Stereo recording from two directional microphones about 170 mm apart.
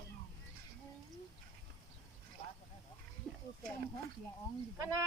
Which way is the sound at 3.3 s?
Centre (ahead or behind).